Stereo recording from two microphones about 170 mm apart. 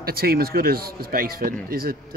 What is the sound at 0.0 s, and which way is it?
A man's voice, 65° right (ahead or behind).